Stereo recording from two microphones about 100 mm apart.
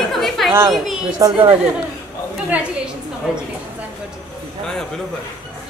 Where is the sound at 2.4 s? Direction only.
15° right (ahead or behind).